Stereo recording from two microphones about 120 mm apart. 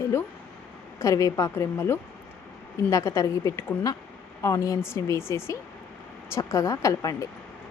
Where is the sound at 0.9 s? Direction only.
25° left (ahead or behind).